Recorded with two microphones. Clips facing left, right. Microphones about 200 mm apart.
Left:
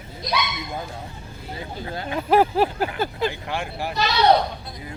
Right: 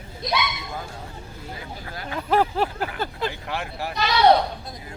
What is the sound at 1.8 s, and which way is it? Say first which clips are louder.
Speech: left 4 dB; 25° left (ahead or behind).